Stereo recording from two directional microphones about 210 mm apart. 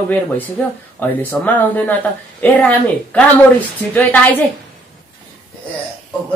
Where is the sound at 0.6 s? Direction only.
5° left (ahead or behind).